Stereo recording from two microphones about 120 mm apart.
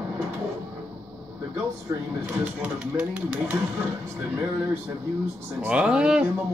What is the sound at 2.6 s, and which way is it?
Speech, 10° right (ahead or behind).